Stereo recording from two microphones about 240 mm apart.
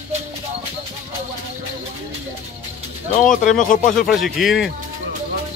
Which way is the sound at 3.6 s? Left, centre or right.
Left.